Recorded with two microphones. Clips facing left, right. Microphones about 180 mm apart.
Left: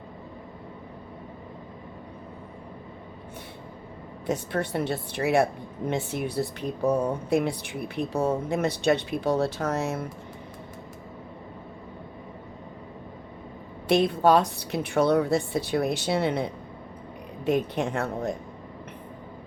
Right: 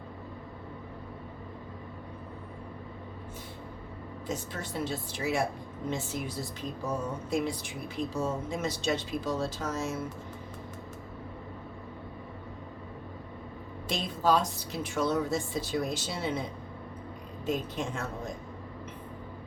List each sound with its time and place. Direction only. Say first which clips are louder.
4.3 s a woman's voice: left 9 dB; 65° left (ahead or behind)
13.8 s a woman's voice: left 8 dB; 65° left (ahead or behind)